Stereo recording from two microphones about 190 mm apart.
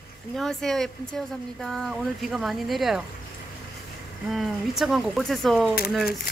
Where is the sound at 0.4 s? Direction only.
Centre (ahead or behind).